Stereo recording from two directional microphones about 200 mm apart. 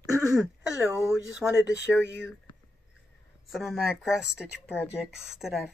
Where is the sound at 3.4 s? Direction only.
Centre (ahead or behind).